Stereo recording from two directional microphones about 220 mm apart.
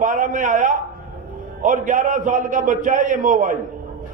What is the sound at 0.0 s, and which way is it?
A man's voice, 35° right (ahead or behind).